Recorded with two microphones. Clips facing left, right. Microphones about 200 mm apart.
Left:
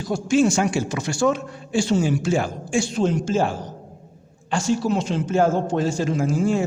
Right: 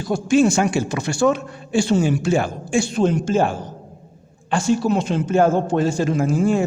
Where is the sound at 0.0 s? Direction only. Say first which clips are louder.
Right 2 dB; 60° right (ahead or behind).